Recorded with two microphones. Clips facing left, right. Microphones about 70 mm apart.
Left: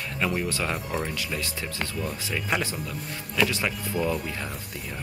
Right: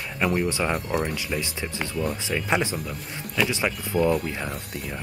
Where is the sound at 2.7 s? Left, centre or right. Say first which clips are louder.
Right 1 dB; centre.